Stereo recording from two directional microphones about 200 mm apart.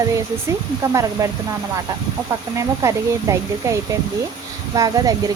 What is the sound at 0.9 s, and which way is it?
Speech, 15° right (ahead or behind).